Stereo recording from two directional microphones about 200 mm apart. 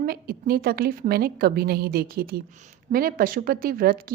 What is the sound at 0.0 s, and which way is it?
A woman's voice, 50° right (ahead or behind).